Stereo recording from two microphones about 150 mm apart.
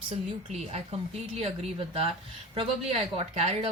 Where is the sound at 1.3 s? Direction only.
45° right (ahead or behind).